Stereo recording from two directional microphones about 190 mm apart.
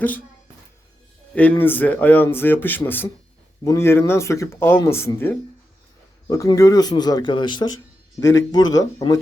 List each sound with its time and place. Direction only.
1.4 s speech: 10° left (ahead or behind)
8.2 s speech: 80° left
8.7 s speech: 20° left (ahead or behind)